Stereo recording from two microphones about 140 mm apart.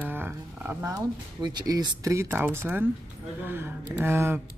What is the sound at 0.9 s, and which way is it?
Speech, 30° right (ahead or behind).